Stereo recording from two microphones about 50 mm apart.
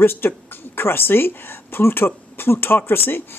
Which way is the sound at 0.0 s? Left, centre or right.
Left.